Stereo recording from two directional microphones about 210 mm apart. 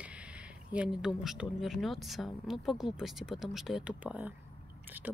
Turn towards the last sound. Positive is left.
turn(degrees=-5)  # may be behind; listen again after turning